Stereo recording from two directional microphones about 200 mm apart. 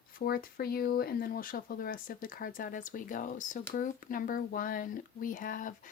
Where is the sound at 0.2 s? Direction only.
50° left (ahead or behind).